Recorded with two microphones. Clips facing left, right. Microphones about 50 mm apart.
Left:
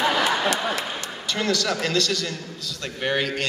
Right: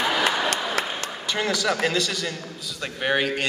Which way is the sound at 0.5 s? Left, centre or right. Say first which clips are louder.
Left 1 dB; right.